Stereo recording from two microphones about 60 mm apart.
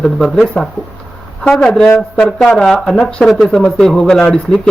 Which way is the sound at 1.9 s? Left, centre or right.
Centre.